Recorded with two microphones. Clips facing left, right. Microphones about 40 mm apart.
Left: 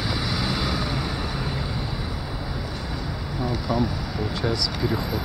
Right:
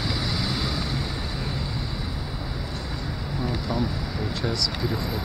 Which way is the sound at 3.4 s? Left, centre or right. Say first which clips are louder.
Left 3 dB; centre.